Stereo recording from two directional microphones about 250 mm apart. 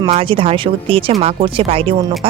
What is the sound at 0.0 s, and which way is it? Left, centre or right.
Speech, right.